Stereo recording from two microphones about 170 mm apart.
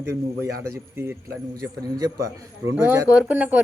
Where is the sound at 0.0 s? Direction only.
15° right (ahead or behind).